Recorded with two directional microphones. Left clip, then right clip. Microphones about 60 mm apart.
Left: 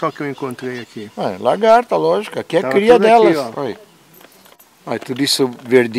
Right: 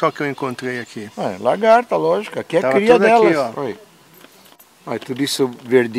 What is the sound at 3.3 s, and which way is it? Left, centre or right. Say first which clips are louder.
Speech: left 1 dB; right.